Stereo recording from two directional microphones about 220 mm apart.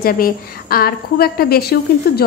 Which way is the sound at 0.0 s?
40° left (ahead or behind).